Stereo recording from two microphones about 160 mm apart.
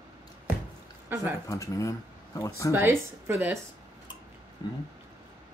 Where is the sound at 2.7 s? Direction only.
15° right (ahead or behind).